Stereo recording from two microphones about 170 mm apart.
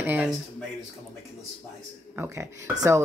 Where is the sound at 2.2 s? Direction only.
15° right (ahead or behind).